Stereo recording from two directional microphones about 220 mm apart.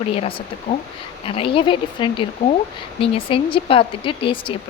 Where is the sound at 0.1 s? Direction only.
25° left (ahead or behind).